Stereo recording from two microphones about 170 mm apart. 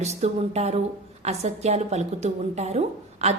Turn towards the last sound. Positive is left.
turn(degrees=-40)  # may be behind; listen again after turning